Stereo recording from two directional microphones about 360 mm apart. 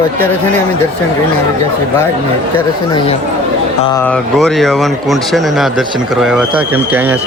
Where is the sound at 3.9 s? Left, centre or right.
Centre.